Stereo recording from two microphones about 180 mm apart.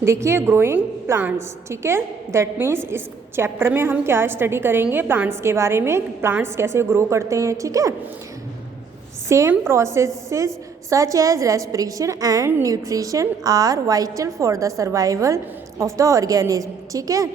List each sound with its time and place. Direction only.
0.0 s a woman's voice: 15° right (ahead or behind)
9.3 s a woman's voice: 15° right (ahead or behind)